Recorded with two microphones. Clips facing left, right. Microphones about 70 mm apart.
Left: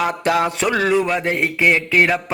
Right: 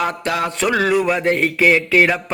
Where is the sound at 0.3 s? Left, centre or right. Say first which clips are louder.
Left 6 dB; left.